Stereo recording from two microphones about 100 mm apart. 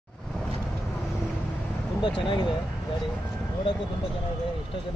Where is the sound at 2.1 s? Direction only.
55° left (ahead or behind).